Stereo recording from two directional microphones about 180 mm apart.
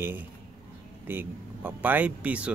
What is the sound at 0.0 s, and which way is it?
Speech, 10° right (ahead or behind).